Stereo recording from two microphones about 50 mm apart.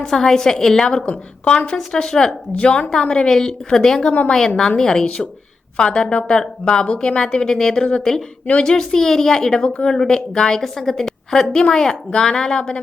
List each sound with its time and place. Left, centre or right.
0.0 s a woman's voice: centre
1.0 s a woman's voice: left
5.0 s a woman's voice: left
9.6 s a woman's voice: left